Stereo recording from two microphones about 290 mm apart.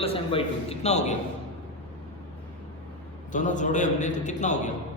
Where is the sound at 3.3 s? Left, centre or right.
Left.